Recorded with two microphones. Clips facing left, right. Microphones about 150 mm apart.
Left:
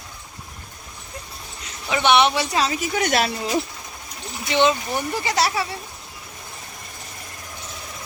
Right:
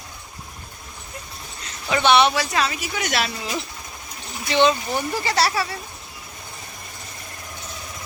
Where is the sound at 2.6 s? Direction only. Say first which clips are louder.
Left 3 dB; 35° left (ahead or behind).